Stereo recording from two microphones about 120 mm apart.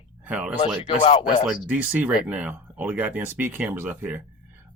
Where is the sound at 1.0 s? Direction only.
45° left (ahead or behind).